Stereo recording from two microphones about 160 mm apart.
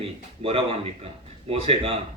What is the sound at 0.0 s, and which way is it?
Speech, 35° right (ahead or behind).